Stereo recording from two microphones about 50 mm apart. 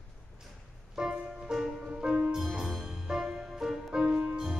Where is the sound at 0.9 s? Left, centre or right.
Centre.